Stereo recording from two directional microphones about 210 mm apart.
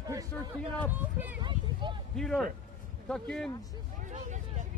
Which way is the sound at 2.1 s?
5° left (ahead or behind).